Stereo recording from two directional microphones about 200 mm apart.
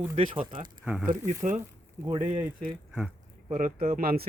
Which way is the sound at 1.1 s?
40° right (ahead or behind).